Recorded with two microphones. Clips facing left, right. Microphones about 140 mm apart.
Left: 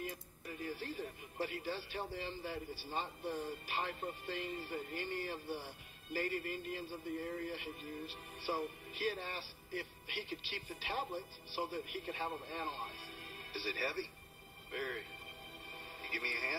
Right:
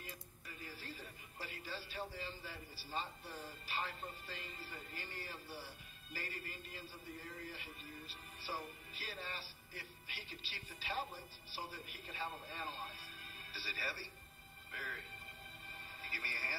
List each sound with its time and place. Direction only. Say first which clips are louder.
0.0 s a man's voice: left 9 dB; 50° left (ahead or behind)
16.0 s a man's voice: left 5 dB; 55° left (ahead or behind)